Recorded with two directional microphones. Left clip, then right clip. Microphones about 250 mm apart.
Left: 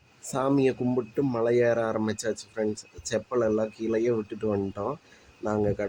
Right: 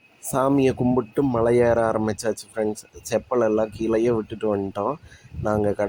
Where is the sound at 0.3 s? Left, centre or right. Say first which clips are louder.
Right 5 dB; centre.